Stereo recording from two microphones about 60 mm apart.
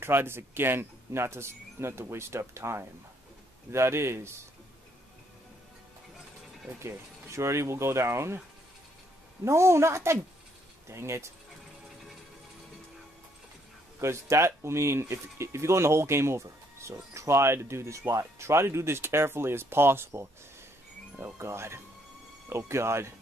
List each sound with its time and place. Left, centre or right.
0.0 s speech: right
6.8 s speech: right
9.4 s speech: right
13.9 s speech: right
21.4 s speech: right